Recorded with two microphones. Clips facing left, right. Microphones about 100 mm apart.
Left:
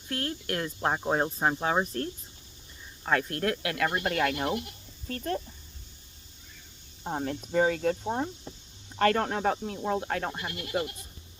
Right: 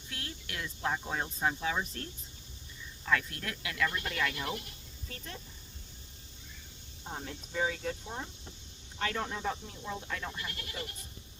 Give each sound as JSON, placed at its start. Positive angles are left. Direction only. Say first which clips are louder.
{"t": 0.1, "sound": "speech", "louder": "left 12 dB", "side_deg": 50}
{"t": 7.0, "sound": "speech", "louder": "left 10 dB", "side_deg": 50}